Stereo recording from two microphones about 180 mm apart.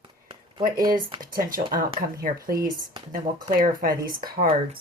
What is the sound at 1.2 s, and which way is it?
Speech, 50° right (ahead or behind).